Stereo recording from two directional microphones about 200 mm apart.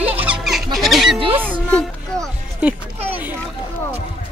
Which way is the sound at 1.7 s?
5° left (ahead or behind).